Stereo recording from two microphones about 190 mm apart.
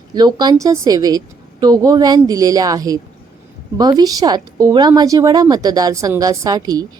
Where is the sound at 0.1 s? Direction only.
20° right (ahead or behind).